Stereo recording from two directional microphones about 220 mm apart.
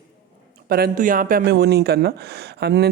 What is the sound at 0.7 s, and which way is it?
Speech, 45° right (ahead or behind).